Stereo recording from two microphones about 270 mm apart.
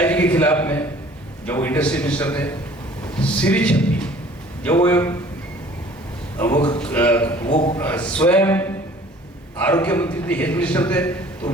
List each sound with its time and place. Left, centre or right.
0.0 s a sound: centre
1.5 s a man's voice: centre
6.3 s a man's voice: centre
7.5 s a man's voice: centre
7.8 s a man's voice: centre